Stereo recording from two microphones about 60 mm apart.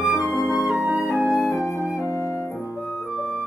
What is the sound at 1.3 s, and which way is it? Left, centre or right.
Flute, left.